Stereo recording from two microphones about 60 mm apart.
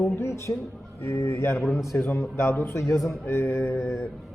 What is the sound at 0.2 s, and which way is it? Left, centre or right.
A man's voice, left.